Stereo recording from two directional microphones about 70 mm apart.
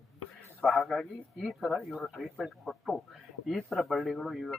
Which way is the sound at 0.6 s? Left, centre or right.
Centre.